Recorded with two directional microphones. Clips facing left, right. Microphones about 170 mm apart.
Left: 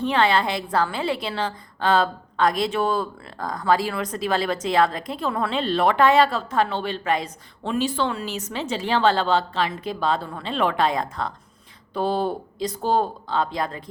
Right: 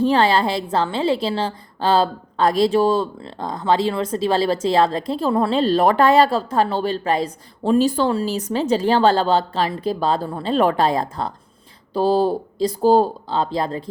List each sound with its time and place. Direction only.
0.0 s a woman's voice: 35° right (ahead or behind)